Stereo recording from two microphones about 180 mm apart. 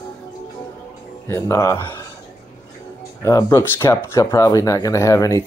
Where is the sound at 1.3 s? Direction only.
15° left (ahead or behind).